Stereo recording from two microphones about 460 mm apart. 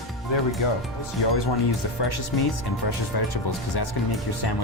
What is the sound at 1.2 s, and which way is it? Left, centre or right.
Speech, left.